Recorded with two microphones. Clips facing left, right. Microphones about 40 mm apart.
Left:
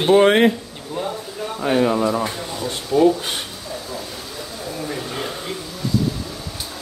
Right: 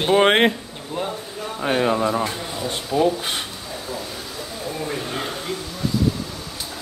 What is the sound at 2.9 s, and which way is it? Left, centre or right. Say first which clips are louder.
Speech: left 4 dB; centre.